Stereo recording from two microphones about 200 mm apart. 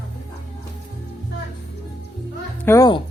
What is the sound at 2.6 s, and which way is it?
Music, 15° left (ahead or behind).